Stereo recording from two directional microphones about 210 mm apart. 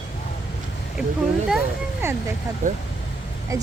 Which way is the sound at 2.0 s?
10° right (ahead or behind).